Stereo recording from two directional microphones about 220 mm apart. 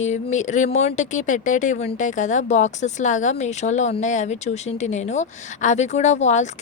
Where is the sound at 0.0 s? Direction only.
30° left (ahead or behind).